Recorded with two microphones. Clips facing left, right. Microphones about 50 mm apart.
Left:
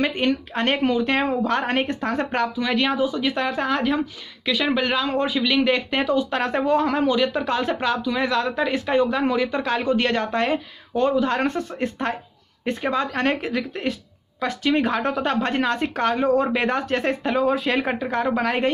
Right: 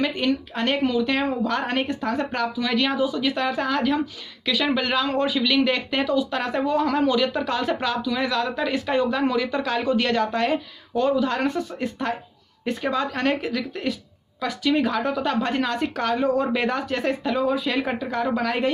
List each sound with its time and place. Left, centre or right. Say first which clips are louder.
0.0 s speech: left 1 dB; left
17.5 s speech: left 2 dB; left
17.9 s speech: left 2 dB; left